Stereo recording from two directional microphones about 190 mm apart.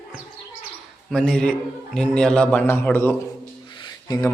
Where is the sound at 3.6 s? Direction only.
25° left (ahead or behind).